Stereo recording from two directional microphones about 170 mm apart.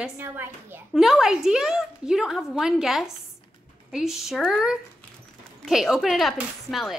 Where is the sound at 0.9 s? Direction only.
Centre (ahead or behind).